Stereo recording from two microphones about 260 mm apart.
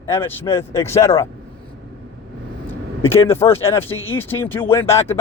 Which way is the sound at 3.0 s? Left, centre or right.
Centre.